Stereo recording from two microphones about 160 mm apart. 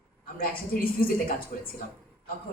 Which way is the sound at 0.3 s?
65° left (ahead or behind).